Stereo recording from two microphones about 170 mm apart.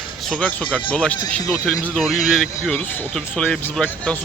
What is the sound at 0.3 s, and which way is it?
Speech, 5° left (ahead or behind).